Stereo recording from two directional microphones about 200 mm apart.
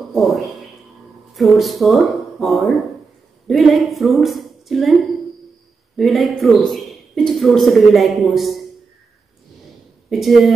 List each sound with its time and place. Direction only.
0.0 s a woman's voice: centre (ahead or behind)
5.9 s speech: centre (ahead or behind)
10.0 s speech: centre (ahead or behind)